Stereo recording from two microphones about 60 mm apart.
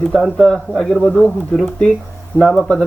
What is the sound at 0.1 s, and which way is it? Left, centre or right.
Speech, centre.